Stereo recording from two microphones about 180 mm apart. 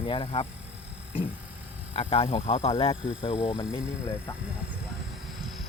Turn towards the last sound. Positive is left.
turn(degrees=15)  # may be behind; listen again after turning